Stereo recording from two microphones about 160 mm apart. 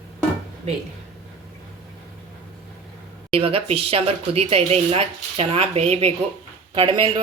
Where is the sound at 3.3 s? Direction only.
40° right (ahead or behind).